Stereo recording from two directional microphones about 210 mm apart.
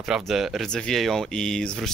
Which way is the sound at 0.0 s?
Centre (ahead or behind).